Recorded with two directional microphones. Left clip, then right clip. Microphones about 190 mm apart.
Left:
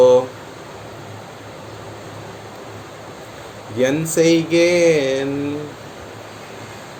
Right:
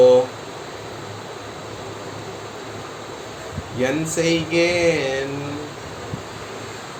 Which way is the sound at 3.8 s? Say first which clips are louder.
Left 5 dB; 55° left (ahead or behind).